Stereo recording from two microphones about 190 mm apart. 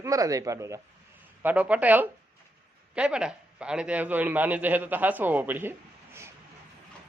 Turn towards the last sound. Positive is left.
turn(degrees=-10)  # may be behind; listen again after turning